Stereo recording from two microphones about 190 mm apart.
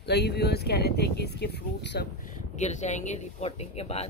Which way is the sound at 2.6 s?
40° left (ahead or behind).